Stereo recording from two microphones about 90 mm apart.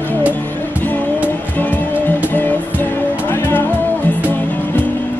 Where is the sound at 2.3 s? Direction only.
20° left (ahead or behind).